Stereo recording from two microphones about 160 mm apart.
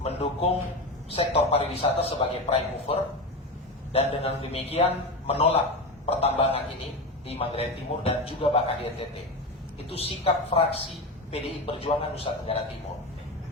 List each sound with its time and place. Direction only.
0.0 s a man's voice: 40° left (ahead or behind)